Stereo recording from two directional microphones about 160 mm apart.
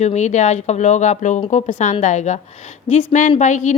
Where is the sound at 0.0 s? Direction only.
45° left (ahead or behind).